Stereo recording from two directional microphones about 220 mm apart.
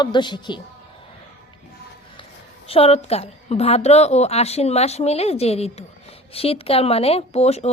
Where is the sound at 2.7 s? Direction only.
25° left (ahead or behind).